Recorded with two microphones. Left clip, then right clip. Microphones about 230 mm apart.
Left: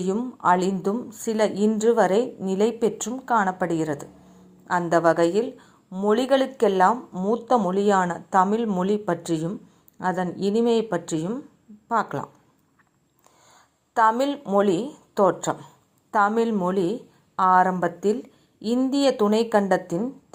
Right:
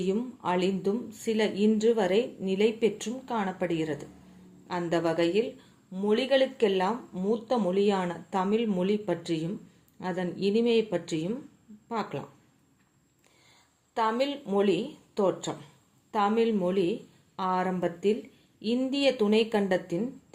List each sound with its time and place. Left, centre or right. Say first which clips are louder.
0.0 s speech: left 7 dB; left
13.5 s speech: left 7 dB; left